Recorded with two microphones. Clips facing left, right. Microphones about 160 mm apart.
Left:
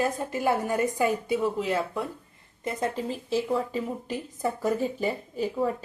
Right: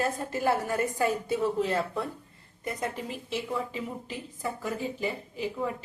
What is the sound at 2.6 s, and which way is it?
A woman's voice, 25° left (ahead or behind).